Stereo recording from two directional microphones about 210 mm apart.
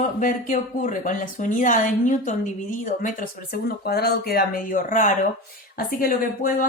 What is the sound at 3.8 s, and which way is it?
Speech, 50° left (ahead or behind).